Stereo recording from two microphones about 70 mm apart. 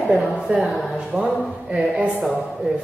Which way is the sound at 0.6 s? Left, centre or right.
Centre.